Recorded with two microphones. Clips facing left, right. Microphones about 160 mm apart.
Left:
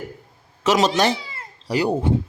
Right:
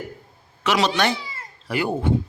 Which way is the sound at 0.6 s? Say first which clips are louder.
Left 3 dB; 40° left (ahead or behind).